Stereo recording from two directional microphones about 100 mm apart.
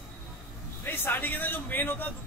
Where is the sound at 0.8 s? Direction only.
20° left (ahead or behind).